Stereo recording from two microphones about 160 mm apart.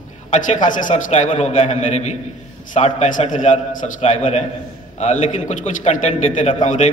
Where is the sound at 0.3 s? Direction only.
55° left (ahead or behind).